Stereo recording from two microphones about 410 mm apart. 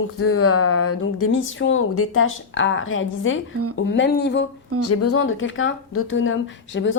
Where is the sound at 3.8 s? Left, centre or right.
Left.